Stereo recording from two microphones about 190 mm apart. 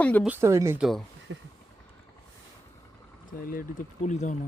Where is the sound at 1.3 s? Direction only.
85° right.